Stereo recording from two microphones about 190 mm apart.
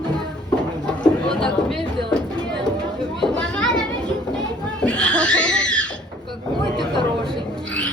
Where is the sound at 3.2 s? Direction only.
5° left (ahead or behind).